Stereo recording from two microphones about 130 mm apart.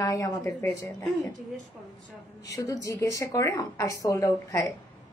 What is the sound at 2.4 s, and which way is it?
A woman's voice, 25° left (ahead or behind).